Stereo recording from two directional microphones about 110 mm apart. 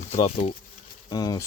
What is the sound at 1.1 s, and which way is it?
Speech, 40° left (ahead or behind).